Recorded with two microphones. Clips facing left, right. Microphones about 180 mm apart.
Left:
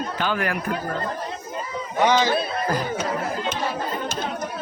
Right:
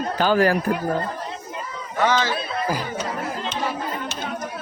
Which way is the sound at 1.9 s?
15° left (ahead or behind).